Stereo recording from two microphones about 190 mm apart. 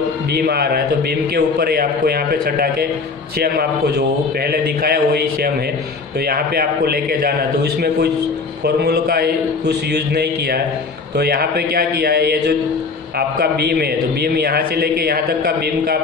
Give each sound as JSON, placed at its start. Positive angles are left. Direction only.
{"t": 0.3, "sound": "a man's voice", "side_deg": -55}